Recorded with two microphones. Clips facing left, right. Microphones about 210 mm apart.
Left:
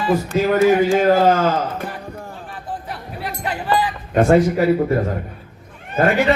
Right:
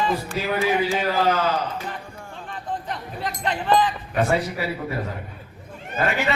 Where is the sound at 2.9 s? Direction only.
10° left (ahead or behind).